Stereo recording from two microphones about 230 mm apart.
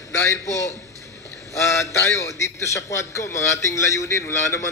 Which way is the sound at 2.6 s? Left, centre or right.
Centre.